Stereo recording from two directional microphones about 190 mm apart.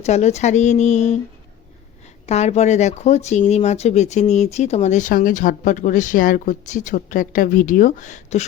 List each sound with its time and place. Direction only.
0.0 s speech: 35° left (ahead or behind)
2.2 s speech: 35° left (ahead or behind)